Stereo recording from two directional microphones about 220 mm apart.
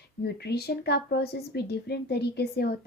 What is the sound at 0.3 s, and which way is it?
Speech, 45° left (ahead or behind).